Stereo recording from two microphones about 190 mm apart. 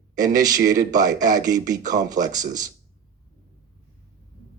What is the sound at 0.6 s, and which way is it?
Speech, 45° right (ahead or behind).